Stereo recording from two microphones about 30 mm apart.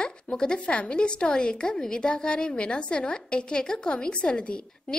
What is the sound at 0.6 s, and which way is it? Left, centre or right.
A woman's voice, left.